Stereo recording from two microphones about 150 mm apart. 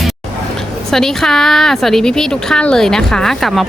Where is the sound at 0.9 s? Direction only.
5° left (ahead or behind).